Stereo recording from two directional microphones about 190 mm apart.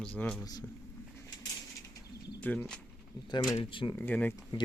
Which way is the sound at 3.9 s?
10° left (ahead or behind).